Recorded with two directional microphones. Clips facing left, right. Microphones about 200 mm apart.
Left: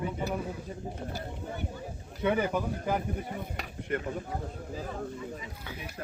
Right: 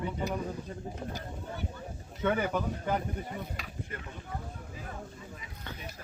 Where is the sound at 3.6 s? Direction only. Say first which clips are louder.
Left 8 dB; 65° left (ahead or behind).